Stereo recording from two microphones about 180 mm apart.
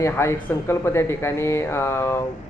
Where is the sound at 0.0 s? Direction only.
15° left (ahead or behind).